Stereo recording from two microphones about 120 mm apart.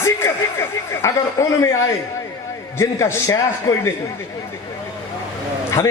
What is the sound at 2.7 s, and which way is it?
A man's voice, 25° left (ahead or behind).